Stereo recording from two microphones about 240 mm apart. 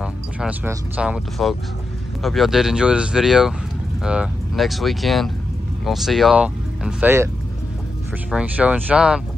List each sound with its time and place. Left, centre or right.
0.0 s speech: centre
8.3 s speech: centre